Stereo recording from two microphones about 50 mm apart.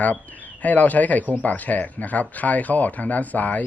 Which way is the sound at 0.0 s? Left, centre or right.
Left.